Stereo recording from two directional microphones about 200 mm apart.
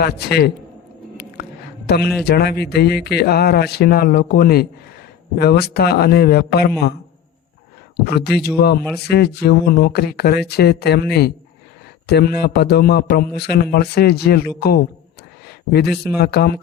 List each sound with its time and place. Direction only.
0.0 s a man's voice: 50° left (ahead or behind)
1.1 s biting: 55° left (ahead or behind)
2.2 s a man's voice: 55° left (ahead or behind)
8.1 s a man's voice: 55° left (ahead or behind)
15.4 s a sound: 55° left (ahead or behind)
16.1 s a man's voice: 55° left (ahead or behind)